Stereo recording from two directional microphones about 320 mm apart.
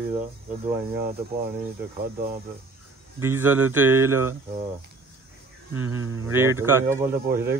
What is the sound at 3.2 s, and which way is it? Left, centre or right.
Speech, centre.